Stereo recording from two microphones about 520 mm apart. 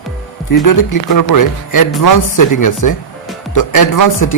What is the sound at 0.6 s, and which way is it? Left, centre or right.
Speech, left.